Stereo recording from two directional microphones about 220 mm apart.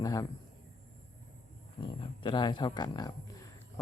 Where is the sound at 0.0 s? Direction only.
15° left (ahead or behind).